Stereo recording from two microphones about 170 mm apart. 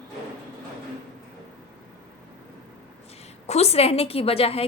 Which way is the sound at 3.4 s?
40° left (ahead or behind).